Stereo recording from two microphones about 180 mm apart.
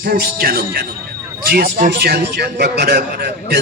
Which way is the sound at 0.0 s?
55° right (ahead or behind).